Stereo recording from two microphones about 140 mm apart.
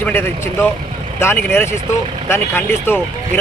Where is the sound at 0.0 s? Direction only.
15° left (ahead or behind).